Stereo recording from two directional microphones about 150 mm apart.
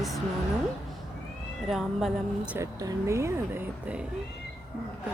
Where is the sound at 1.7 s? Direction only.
Centre (ahead or behind).